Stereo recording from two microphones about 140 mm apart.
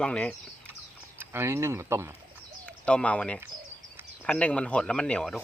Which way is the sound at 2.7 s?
10° left (ahead or behind).